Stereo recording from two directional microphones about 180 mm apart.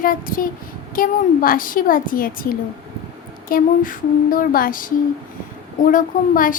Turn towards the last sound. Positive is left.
turn(degrees=50)  # may be behind; listen again after turning